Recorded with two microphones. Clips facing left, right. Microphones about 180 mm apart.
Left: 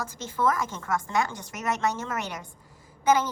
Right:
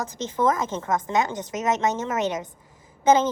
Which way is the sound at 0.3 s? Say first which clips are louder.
Right 3 dB; 20° right (ahead or behind).